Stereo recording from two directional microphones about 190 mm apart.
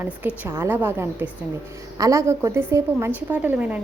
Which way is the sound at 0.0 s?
10° right (ahead or behind).